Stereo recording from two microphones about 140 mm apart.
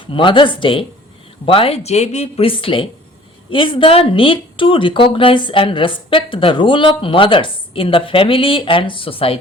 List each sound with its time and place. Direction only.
0.0 s a woman's voice: 35° left (ahead or behind)